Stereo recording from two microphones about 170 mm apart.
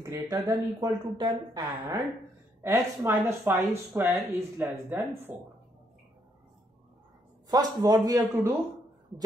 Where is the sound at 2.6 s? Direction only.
15° right (ahead or behind).